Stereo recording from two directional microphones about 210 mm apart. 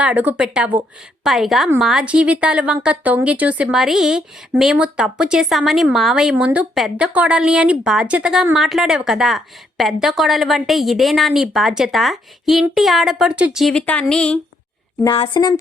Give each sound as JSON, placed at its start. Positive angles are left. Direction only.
{"t": 0.0, "sound": "a woman's voice", "side_deg": -10}
{"t": 15.0, "sound": "a woman's voice", "side_deg": 25}